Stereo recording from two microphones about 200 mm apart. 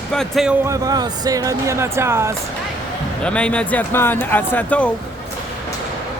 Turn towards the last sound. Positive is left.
turn(degrees=5)  # may be behind; listen again after turning